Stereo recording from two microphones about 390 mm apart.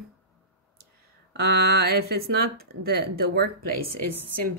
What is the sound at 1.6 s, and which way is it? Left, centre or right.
Speech, right.